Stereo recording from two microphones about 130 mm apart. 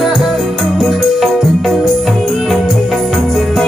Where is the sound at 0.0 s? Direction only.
Centre (ahead or behind).